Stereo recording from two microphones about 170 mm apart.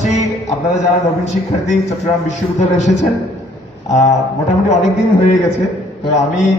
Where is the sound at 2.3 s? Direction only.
45° left (ahead or behind).